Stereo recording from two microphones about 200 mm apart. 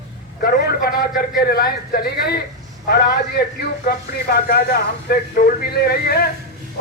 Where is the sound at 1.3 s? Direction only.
50° left (ahead or behind).